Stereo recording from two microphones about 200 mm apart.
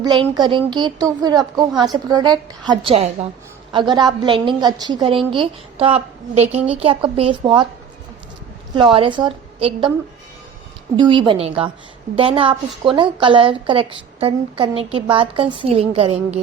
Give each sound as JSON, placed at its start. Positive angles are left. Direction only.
{"t": 0.0, "sound": "a woman's voice", "side_deg": -20}
{"t": 8.7, "sound": "a woman's voice", "side_deg": -25}
{"t": 10.9, "sound": "a woman's voice", "side_deg": -25}